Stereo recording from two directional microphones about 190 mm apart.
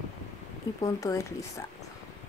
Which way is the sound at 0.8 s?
20° left (ahead or behind).